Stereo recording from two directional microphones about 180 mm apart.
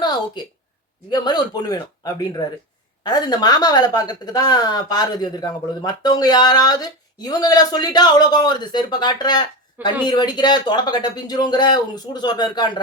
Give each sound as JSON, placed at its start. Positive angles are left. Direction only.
{"t": 0.4, "sound": "speech", "side_deg": 25}